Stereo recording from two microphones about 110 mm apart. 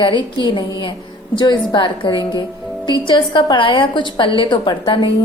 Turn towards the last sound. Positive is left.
turn(degrees=50)  # may be behind; listen again after turning